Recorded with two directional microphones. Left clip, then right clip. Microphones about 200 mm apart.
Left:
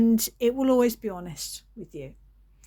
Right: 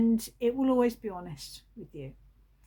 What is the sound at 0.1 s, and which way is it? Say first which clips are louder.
Speech: left 5 dB; 50° left (ahead or behind).